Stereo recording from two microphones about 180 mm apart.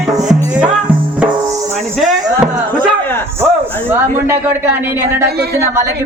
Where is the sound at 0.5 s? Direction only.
5° right (ahead or behind).